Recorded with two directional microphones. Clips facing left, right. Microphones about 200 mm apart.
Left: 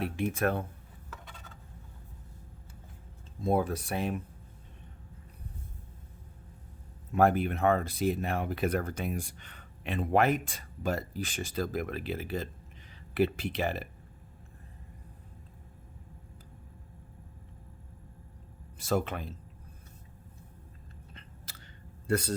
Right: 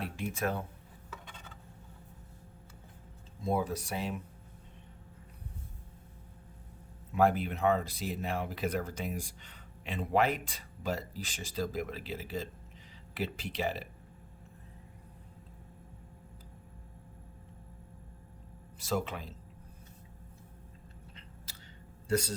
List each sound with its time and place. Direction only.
0.0 s speech: 60° left (ahead or behind)
3.4 s speech: 55° left (ahead or behind)
7.1 s speech: 55° left (ahead or behind)
18.8 s speech: 50° left (ahead or behind)
22.0 s speech: 55° left (ahead or behind)